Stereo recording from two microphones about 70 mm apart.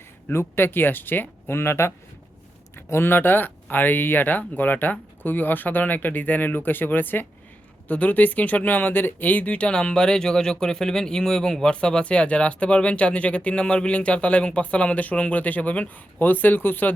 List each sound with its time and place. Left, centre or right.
0.3 s speech: left